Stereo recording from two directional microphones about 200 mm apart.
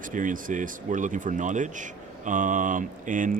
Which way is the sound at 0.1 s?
40° right (ahead or behind).